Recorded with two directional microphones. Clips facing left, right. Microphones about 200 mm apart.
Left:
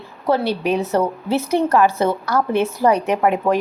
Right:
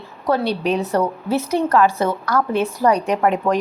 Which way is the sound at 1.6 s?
15° left (ahead or behind).